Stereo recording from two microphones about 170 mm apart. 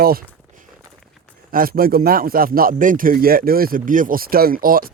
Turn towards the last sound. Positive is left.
turn(degrees=-55)  # may be behind; listen again after turning